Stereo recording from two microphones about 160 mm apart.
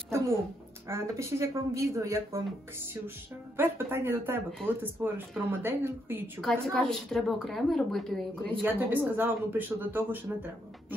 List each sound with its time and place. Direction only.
0.8 s speech: 15° right (ahead or behind)
3.5 s speech: 15° right (ahead or behind)
6.4 s a woman's voice: 5° left (ahead or behind)
8.6 s speech: 10° right (ahead or behind)